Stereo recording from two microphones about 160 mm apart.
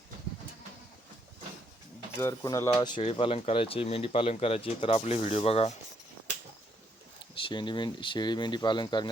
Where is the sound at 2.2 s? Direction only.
20° left (ahead or behind).